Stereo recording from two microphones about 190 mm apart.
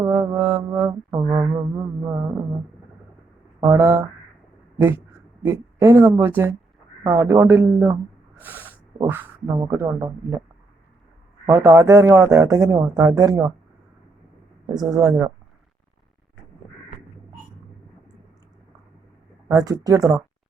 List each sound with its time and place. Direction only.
0.0 s music: 15° right (ahead or behind)
3.6 s music: 15° right (ahead or behind)
5.4 s a woman's voice: 10° right (ahead or behind)
7.0 s music: 15° right (ahead or behind)
8.4 s speech: 10° right (ahead or behind)
11.4 s music: 15° right (ahead or behind)
14.7 s speech: 20° right (ahead or behind)
19.5 s music: 15° right (ahead or behind)